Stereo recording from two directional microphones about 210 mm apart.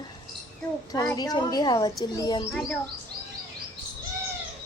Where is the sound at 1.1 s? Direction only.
20° left (ahead or behind).